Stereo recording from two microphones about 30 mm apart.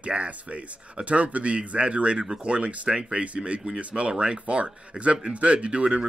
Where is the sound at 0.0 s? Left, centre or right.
Right.